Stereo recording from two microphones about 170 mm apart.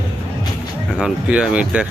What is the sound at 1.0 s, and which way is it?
Speech, 5° right (ahead or behind).